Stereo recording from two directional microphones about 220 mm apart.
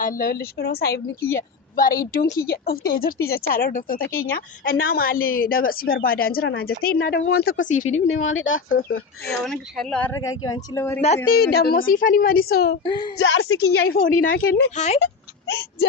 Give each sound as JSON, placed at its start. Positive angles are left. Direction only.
{"t": 0.0, "sound": "a woman's voice", "side_deg": 40}
{"t": 8.3, "sound": "a woman's voice", "side_deg": 60}
{"t": 8.8, "sound": "a woman's voice", "side_deg": 45}
{"t": 9.4, "sound": "speech", "side_deg": 0}
{"t": 10.2, "sound": "a woman's voice", "side_deg": 15}
{"t": 11.3, "sound": "a woman's voice", "side_deg": 45}
{"t": 12.8, "sound": "a woman's voice", "side_deg": 20}
{"t": 13.1, "sound": "a woman's voice", "side_deg": 60}
{"t": 13.9, "sound": "a woman's voice", "side_deg": 40}
{"t": 14.8, "sound": "speech", "side_deg": 30}